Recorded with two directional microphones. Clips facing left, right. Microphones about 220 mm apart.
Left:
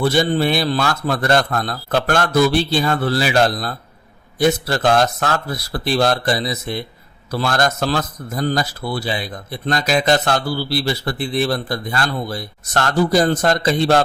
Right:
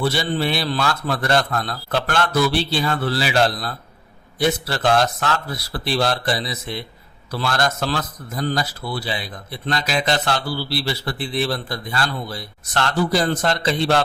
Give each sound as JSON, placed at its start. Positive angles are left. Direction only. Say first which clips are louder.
{"t": 0.0, "sound": "a man's voice", "louder": "left 5 dB", "side_deg": 45}